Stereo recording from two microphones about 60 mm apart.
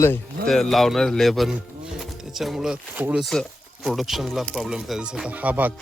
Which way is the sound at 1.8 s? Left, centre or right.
Centre.